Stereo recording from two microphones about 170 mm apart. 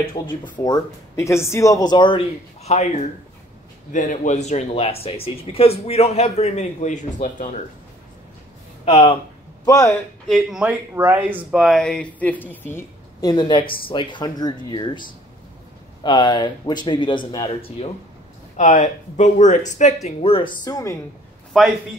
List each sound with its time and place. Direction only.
0.7 s speech: 20° left (ahead or behind); by 2.9 s 40° left (ahead or behind)
3.9 s speech: 50° left (ahead or behind)
8.8 s speech: 35° left (ahead or behind)
9.7 s speech: 20° left (ahead or behind)
10.2 s speech: centre (ahead or behind); by 17.9 s 35° left (ahead or behind)
18.6 s speech: 45° left (ahead or behind); by 20.9 s 25° left (ahead or behind)
21.5 s a man's voice: centre (ahead or behind)